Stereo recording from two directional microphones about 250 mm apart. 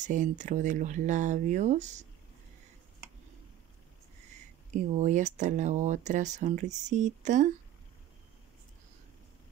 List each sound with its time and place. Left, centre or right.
0.0 s speech: right
4.7 s speech: right